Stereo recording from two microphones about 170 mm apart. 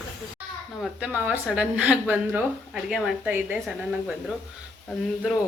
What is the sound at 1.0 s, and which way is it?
A woman's voice, 5° right (ahead or behind).